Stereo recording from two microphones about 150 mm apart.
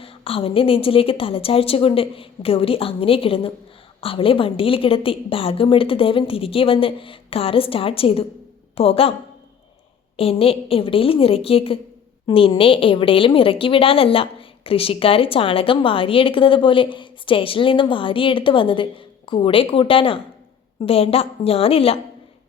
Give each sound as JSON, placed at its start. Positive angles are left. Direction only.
{"t": 0.0, "sound": "a woman's voice", "side_deg": 40}
{"t": 10.2, "sound": "a woman's voice", "side_deg": 40}